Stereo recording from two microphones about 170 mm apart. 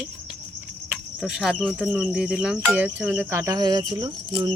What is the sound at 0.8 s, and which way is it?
Speech, 5° right (ahead or behind).